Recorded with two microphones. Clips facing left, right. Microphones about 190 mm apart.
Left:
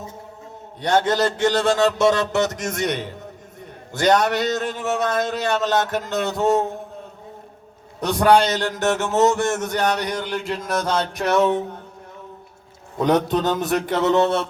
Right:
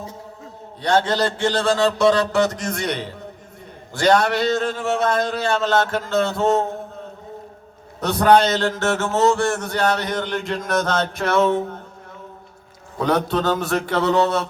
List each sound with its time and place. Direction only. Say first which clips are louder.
0.8 s a man's voice: even; 20° left (ahead or behind)
8.0 s a man's voice: right 1 dB; 10° left (ahead or behind)
13.0 s a man's voice: left 1 dB; 20° left (ahead or behind)